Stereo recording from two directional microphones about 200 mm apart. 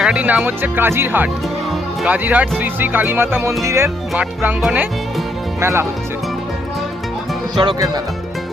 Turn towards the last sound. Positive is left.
turn(degrees=-20)  # may be behind; listen again after turning